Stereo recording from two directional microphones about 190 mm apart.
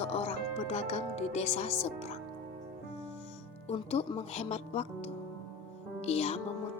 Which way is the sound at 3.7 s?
30° left (ahead or behind).